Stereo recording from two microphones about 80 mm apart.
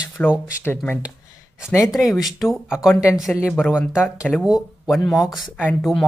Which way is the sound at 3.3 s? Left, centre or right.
Left.